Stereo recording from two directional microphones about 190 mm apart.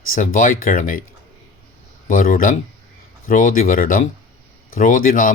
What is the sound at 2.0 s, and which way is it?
Speech, 45° left (ahead or behind).